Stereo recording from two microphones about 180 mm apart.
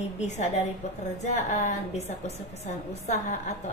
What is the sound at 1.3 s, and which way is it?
A woman's voice, 40° left (ahead or behind).